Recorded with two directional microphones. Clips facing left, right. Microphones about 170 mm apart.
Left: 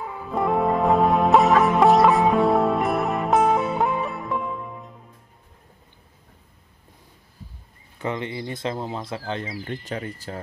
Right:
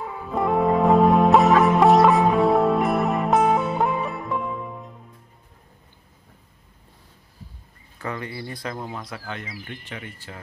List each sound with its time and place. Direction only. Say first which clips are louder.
0.3 s music: right 1 dB; centre (ahead or behind)
8.0 s speech: left 3 dB; 20° left (ahead or behind); by 10.4 s 40° left (ahead or behind)